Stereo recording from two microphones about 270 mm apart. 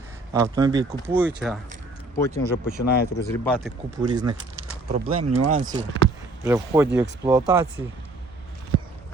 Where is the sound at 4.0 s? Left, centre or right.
Centre.